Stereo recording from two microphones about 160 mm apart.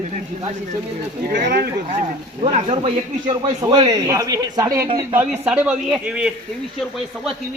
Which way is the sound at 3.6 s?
25° right (ahead or behind).